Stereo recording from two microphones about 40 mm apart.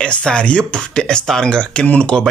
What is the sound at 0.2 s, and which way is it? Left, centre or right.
Speech, left.